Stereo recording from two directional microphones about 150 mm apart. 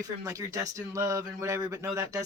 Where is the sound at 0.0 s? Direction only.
20° right (ahead or behind).